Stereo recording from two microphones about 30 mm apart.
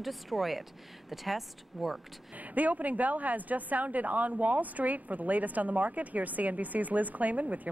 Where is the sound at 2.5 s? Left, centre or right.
Right.